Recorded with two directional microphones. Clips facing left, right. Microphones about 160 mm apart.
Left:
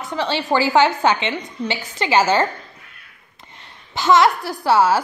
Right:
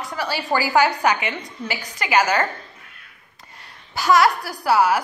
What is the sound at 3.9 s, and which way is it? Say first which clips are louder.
A woman's voice: left 2 dB; 25° left (ahead or behind).